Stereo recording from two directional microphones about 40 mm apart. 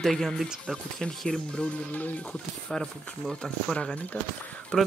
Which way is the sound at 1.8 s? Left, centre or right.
Left.